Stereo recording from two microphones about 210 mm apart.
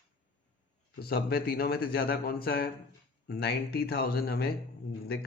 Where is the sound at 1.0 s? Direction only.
50° left (ahead or behind).